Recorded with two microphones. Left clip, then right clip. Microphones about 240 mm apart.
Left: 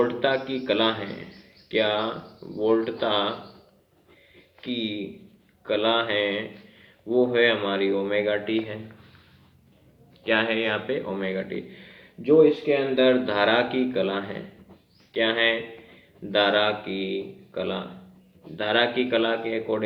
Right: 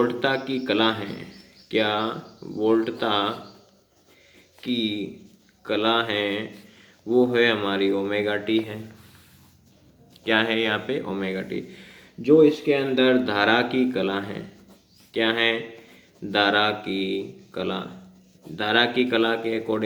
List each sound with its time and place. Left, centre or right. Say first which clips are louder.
0.0 s a man's voice: even; right
4.7 s a man's voice: right 3 dB; right
10.2 s a man's voice: right 1 dB; right